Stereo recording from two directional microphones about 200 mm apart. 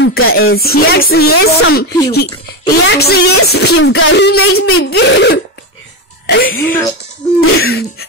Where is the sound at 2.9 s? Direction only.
55° left (ahead or behind).